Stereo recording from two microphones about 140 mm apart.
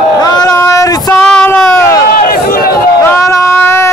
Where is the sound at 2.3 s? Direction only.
90° left.